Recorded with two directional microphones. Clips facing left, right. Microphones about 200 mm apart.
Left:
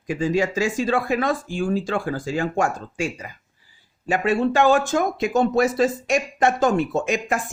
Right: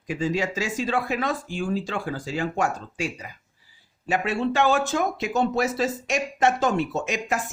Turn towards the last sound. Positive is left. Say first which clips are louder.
# left 4 dB
turn(degrees=50)  # may be behind; listen again after turning